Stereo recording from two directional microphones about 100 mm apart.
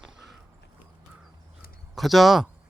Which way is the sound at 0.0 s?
5° right (ahead or behind).